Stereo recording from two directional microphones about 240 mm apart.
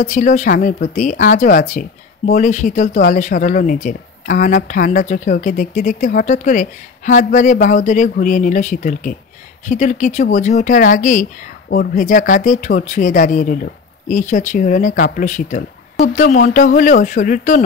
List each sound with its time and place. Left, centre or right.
0.0 s speech: left